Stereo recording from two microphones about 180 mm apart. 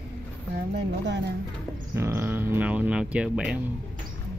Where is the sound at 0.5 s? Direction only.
70° right (ahead or behind).